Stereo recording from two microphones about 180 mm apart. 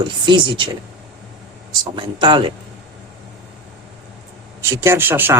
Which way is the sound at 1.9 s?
25° right (ahead or behind).